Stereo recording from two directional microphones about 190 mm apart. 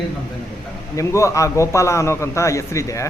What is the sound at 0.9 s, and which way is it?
A man's voice, 15° left (ahead or behind).